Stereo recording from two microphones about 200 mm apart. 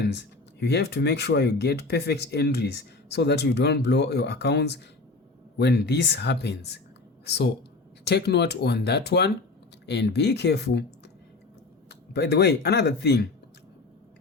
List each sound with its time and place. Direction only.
0.0 s speech: 55° left (ahead or behind)
11.9 s speech: 55° left (ahead or behind)